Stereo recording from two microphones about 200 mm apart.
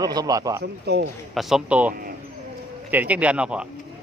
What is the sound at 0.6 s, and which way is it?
Speech, 55° right (ahead or behind).